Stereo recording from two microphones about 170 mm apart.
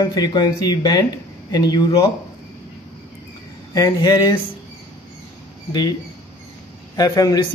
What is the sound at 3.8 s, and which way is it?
Speech, 20° left (ahead or behind).